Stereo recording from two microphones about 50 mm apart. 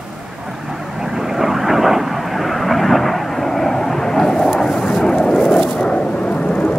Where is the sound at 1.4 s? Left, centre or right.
Centre.